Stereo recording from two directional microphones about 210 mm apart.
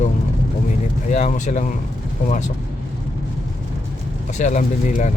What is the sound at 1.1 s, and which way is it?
Speech, 35° left (ahead or behind).